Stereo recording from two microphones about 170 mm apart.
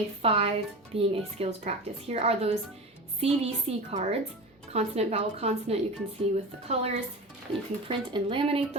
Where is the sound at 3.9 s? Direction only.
35° right (ahead or behind).